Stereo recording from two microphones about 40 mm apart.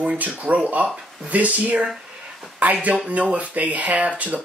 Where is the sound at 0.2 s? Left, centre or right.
Right.